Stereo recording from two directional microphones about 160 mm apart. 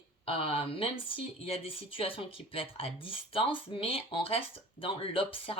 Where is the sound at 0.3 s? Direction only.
35° left (ahead or behind).